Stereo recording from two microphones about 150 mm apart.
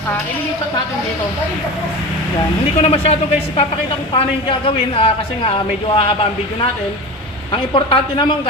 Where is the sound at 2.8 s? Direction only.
40° left (ahead or behind).